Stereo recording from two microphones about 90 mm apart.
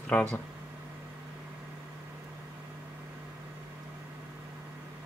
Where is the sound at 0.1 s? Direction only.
20° left (ahead or behind).